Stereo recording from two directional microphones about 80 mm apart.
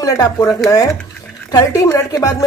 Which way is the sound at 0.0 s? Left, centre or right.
Left.